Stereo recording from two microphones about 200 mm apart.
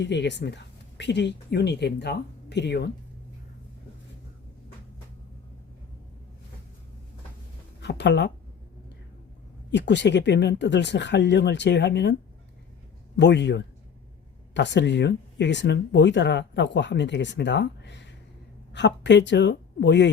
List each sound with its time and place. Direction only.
0.0 s speech: 60° left (ahead or behind)
7.8 s a woman's voice: 60° left (ahead or behind)
9.7 s speech: 60° left (ahead or behind)
13.1 s speech: 60° left (ahead or behind)